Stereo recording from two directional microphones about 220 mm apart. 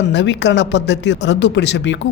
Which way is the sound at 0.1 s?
55° left (ahead or behind).